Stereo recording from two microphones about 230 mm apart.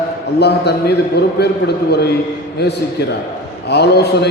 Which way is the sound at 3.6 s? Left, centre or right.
Left.